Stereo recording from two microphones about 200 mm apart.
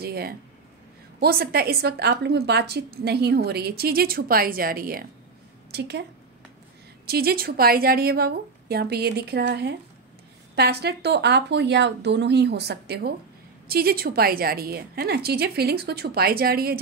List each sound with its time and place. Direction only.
0.0 s a woman's voice: 50° right (ahead or behind)
7.1 s a woman's voice: 50° right (ahead or behind)